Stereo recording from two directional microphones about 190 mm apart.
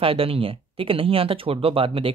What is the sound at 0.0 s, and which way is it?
Speech, 30° right (ahead or behind).